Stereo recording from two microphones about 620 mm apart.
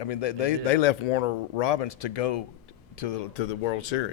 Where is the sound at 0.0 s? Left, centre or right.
Left.